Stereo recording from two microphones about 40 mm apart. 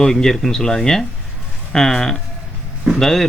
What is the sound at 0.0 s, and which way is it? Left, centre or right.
A man's voice, centre.